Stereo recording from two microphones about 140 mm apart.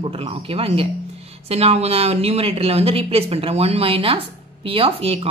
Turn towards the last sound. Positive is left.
turn(degrees=-45)  # may be behind; listen again after turning